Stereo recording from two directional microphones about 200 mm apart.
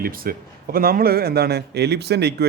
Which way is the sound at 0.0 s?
45° right (ahead or behind).